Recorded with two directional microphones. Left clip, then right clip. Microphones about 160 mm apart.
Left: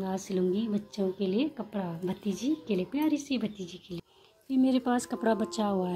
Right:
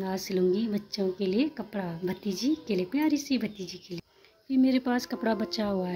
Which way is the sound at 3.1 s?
55° right (ahead or behind).